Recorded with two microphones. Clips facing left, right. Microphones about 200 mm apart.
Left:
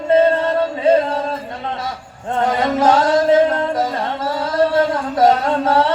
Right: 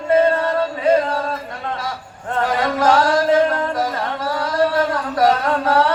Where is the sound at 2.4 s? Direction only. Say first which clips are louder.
Left 2 dB; 20° left (ahead or behind).